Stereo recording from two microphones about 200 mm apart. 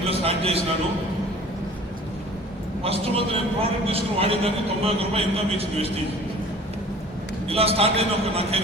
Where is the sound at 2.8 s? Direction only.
30° right (ahead or behind).